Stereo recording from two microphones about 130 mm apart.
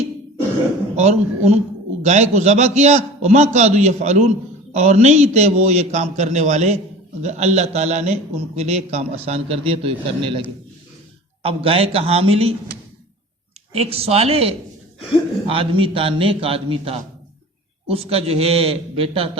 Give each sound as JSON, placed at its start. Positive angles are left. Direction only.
{"t": 0.9, "sound": "a man's voice", "side_deg": -60}
{"t": 11.4, "sound": "a man's voice", "side_deg": -45}
{"t": 13.7, "sound": "a man's voice", "side_deg": -50}